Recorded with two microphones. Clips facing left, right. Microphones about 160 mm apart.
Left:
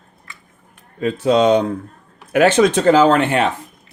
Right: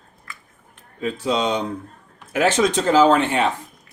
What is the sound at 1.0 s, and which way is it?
Speech, 60° left (ahead or behind).